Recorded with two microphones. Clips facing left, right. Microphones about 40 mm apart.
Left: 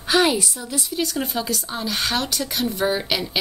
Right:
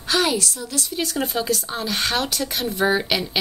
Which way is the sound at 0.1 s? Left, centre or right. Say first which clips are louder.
Left 2 dB; centre.